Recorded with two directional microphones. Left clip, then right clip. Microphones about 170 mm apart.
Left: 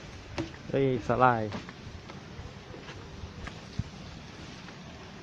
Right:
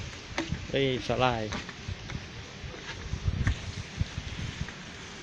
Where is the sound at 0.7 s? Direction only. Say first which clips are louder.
Left 1 dB; 15° left (ahead or behind).